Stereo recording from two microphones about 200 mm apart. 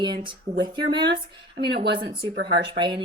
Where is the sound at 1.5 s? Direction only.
55° right (ahead or behind).